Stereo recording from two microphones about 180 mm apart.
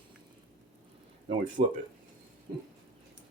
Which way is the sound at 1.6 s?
55° right (ahead or behind).